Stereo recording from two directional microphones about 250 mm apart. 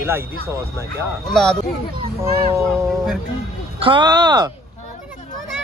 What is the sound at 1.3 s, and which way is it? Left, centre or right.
Speech, centre.